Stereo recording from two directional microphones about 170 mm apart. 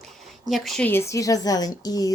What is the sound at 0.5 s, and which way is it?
A woman's voice, centre (ahead or behind).